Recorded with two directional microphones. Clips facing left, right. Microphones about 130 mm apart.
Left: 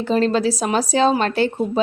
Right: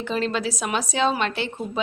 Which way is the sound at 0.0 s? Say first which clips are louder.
Left 7 dB; 40° left (ahead or behind).